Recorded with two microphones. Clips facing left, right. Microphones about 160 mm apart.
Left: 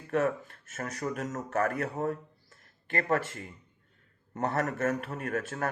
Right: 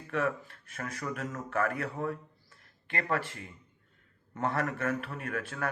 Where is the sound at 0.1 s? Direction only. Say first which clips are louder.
Left 3 dB; 45° left (ahead or behind).